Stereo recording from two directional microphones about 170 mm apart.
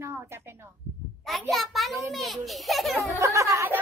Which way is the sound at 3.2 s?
15° right (ahead or behind).